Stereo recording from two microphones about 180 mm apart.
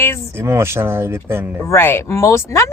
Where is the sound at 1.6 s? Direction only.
15° left (ahead or behind).